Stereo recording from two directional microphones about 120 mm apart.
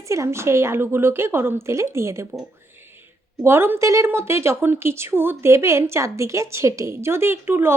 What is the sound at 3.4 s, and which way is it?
Speech, 20° right (ahead or behind).